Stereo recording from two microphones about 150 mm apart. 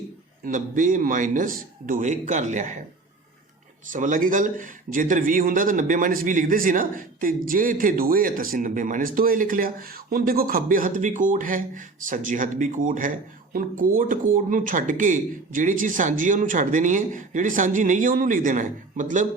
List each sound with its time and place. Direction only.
0.4 s a man's voice: 60° right (ahead or behind)
3.9 s a man's voice: 60° right (ahead or behind)